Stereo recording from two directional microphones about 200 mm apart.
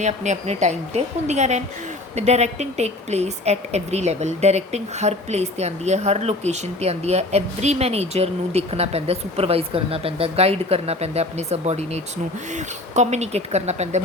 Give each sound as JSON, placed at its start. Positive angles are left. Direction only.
{"t": 0.0, "sound": "a woman's voice", "side_deg": -35}